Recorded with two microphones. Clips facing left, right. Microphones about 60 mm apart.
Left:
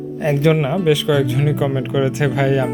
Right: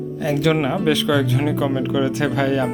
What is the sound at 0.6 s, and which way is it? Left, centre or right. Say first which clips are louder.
Speech: left 2 dB; centre.